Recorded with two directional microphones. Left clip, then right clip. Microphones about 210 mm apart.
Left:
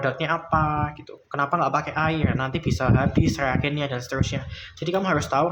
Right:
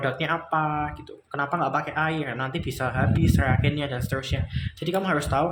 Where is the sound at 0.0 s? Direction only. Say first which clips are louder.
Left 2 dB; 15° left (ahead or behind).